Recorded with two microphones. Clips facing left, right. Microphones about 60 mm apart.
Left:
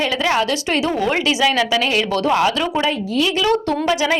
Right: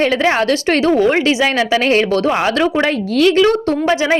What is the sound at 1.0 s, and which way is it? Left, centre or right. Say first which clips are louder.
Speech: right 4 dB; right.